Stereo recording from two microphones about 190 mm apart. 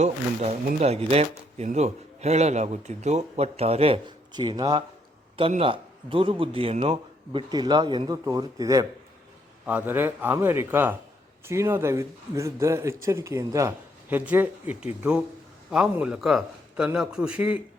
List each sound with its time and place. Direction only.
0.0 s a man's voice: 35° right (ahead or behind); by 17.6 s 5° right (ahead or behind)